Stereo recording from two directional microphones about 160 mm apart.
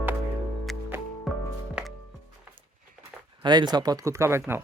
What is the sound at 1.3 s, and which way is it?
Music, centre (ahead or behind).